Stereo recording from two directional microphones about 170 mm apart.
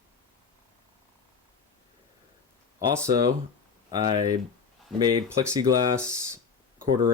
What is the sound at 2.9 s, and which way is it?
Speech, 20° right (ahead or behind).